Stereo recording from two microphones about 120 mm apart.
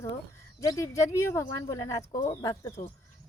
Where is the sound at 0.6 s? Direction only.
30° left (ahead or behind).